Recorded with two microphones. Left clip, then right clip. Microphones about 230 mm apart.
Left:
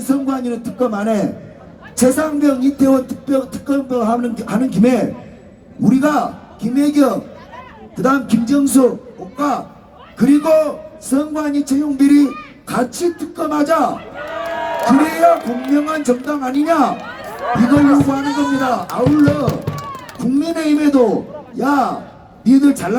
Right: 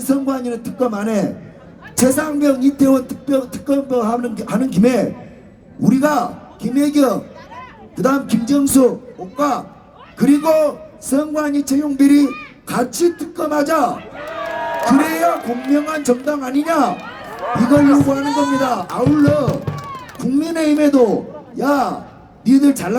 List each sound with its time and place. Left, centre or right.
0.1 s music: right
10.2 s music: right
14.8 s a man's voice: right
15.7 s music: right
20.1 s a man's voice: right
21.6 s music: right